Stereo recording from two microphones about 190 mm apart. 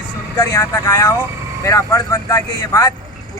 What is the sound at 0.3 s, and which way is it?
Speech, 20° left (ahead or behind).